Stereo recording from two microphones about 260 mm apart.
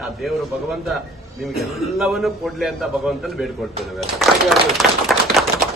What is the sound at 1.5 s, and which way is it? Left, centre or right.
A man's voice, centre.